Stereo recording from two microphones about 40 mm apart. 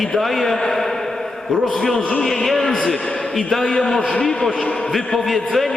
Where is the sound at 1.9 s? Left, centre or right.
Left.